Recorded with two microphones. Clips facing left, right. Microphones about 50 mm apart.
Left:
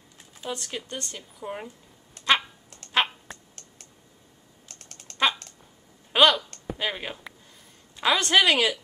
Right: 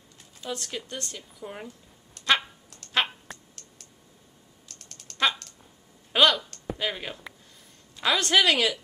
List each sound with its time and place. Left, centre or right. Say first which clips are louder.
0.4 s speech: left 1 dB; centre
2.1 s dog: left 1 dB; centre
2.9 s a sound: left 2 dB; centre
4.6 s typing: left 2 dB; left
5.1 s typing: left 1 dB; centre
6.1 s a sound: left 2 dB; centre
6.8 s speech: left 1 dB; centre